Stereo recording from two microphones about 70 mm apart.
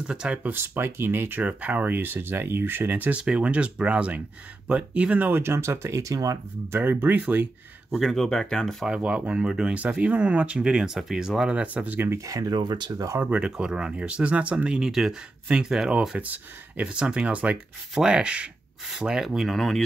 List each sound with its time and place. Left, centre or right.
0.0 s speech: centre
0.5 s speech: right
3.2 s speech: centre; by 6.3 s right
6.7 s speech: right
7.9 s speech: centre
8.8 s speech: centre
12.3 s speech: right
13.2 s speech: centre
14.9 s speech: centre
16.2 s speech: right; by 19.8 s centre